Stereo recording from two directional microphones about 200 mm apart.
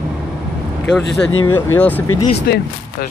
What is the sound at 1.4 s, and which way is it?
Speech, 10° left (ahead or behind).